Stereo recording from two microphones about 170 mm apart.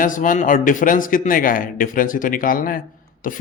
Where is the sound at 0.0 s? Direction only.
50° left (ahead or behind).